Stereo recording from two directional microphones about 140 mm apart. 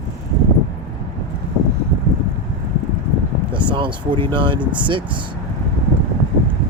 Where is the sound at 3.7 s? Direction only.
35° right (ahead or behind).